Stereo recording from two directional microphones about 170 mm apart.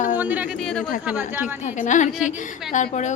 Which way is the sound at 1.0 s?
10° right (ahead or behind).